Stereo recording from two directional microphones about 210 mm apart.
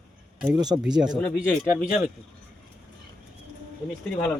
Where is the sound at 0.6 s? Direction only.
20° right (ahead or behind).